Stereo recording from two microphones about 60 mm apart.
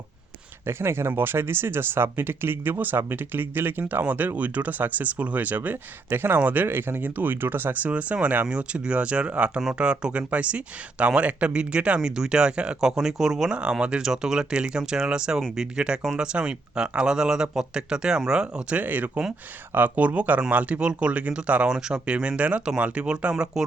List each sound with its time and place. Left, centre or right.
0.7 s speech: right
6.7 s speech: right
23.6 s speech: centre